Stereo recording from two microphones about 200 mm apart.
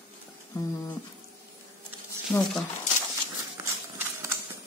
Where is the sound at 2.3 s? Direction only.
10° left (ahead or behind).